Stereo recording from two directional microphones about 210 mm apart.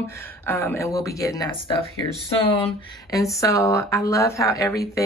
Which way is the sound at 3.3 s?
15° left (ahead or behind).